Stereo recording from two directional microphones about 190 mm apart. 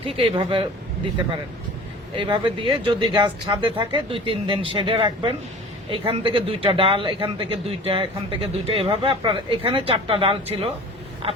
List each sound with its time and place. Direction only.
0.1 s speech: 30° right (ahead or behind)
2.1 s speech: 25° right (ahead or behind)